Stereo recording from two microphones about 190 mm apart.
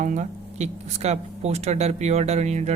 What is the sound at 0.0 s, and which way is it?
Speech, 40° right (ahead or behind).